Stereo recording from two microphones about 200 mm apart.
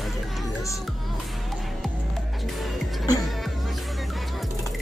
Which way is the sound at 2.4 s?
Centre (ahead or behind).